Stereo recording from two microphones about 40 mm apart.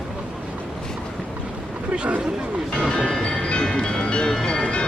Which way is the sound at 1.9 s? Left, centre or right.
Right.